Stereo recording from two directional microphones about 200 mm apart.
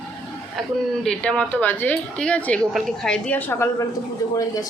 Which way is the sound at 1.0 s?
5° left (ahead or behind).